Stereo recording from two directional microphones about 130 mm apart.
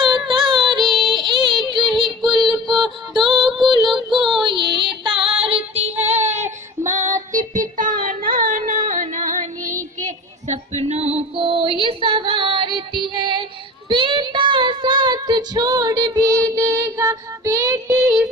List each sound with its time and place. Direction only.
0.0 s music: 35° right (ahead or behind)
0.9 s child singing: 35° right (ahead or behind)
2.4 s music: centre (ahead or behind)
3.2 s music: 35° right (ahead or behind)
4.1 s child singing: centre (ahead or behind)
4.4 s female singing: 40° right (ahead or behind)
6.1 s child singing: 60° right (ahead or behind)
6.9 s music: 70° right (ahead or behind)
10.0 s female singing: 65° right (ahead or behind); by 13.4 s 40° right (ahead or behind)
13.8 s child singing: 40° right (ahead or behind); by 17.9 s 25° right (ahead or behind)
17.9 s child singing: 10° right (ahead or behind)